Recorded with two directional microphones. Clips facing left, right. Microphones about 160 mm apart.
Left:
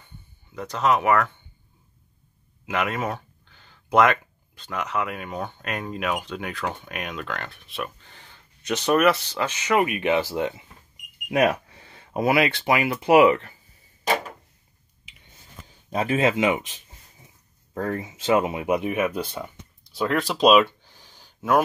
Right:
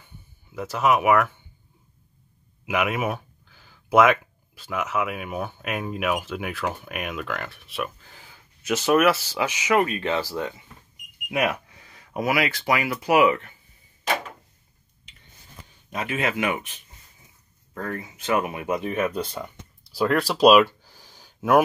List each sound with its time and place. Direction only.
0.0 s a sound: 5° right (ahead or behind)
2.6 s speech: 10° right (ahead or behind)
9.8 s speech: 15° left (ahead or behind)
11.2 s speech: 35° left (ahead or behind)
15.9 s speech: 30° left (ahead or behind)
17.7 s speech: 30° left (ahead or behind); by 20.6 s 5° right (ahead or behind)
20.8 s a sound: 10° right (ahead or behind)